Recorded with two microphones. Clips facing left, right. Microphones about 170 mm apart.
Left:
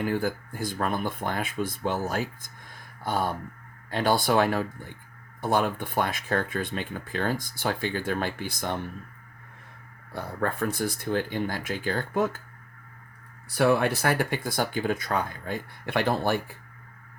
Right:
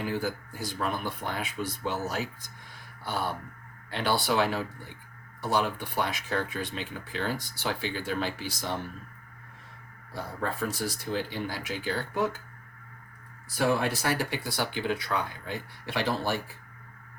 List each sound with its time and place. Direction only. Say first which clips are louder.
0.0 s speech: left 4 dB; 55° left (ahead or behind)
10.4 s speech: left 4 dB; 55° left (ahead or behind)
13.5 s speech: left 4 dB; 60° left (ahead or behind)